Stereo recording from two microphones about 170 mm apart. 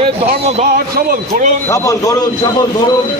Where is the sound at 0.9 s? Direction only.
60° right (ahead or behind).